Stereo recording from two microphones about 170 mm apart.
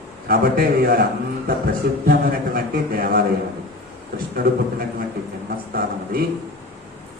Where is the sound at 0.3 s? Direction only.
60° right (ahead or behind).